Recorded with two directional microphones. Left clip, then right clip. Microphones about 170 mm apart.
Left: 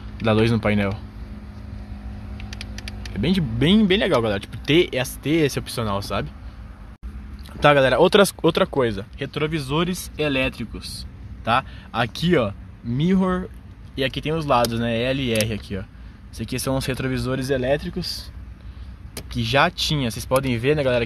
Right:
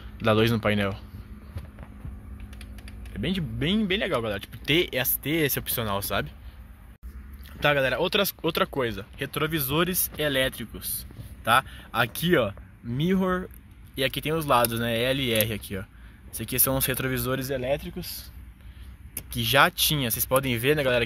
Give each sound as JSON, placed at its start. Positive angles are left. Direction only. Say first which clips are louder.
{"t": 0.2, "sound": "speech", "louder": "left 3 dB", "side_deg": 0}
{"t": 3.0, "sound": "speech", "louder": "left 7 dB", "side_deg": 10}
{"t": 7.6, "sound": "speech", "louder": "left 8 dB", "side_deg": 20}
{"t": 9.2, "sound": "speech", "louder": "left 2 dB", "side_deg": -5}
{"t": 17.4, "sound": "speech", "louder": "left 6 dB", "side_deg": 20}
{"t": 19.3, "sound": "speech", "louder": "left 1 dB", "side_deg": 0}